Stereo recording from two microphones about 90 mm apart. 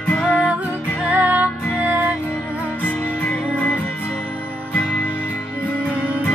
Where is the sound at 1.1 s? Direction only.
15° right (ahead or behind).